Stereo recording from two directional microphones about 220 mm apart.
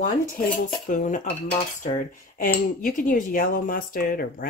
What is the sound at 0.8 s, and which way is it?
Cutlery, 35° left (ahead or behind).